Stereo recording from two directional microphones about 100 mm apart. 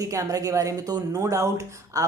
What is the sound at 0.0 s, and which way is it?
Speech, 30° right (ahead or behind).